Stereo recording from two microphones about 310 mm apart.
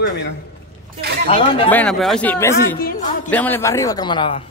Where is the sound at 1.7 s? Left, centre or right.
Centre.